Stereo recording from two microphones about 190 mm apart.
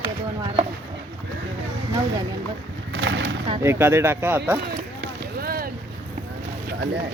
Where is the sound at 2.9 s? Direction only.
65° right (ahead or behind).